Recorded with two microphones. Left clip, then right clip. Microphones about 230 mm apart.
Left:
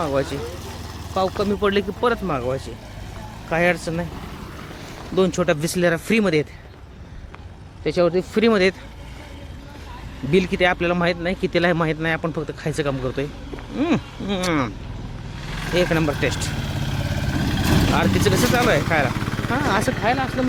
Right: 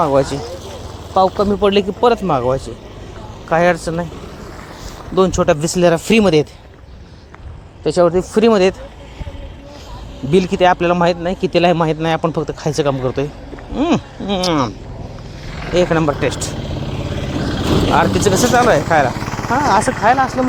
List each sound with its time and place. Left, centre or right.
0.0 s speech: centre
5.1 s speech: centre
7.9 s speech: centre
10.3 s speech: centre
15.4 s wild animals: left
15.7 s speech: centre
16.6 s vehicle: left
17.9 s speech: centre
19.1 s vehicle: centre
19.5 s speech: centre
19.8 s speech: centre
20.1 s speech: centre